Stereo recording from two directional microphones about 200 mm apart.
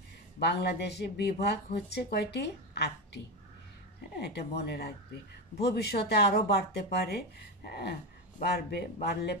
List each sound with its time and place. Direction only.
0.4 s speech: 55° left (ahead or behind)
4.2 s speech: 55° left (ahead or behind)